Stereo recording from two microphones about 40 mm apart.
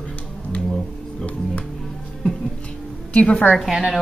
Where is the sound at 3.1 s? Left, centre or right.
Left.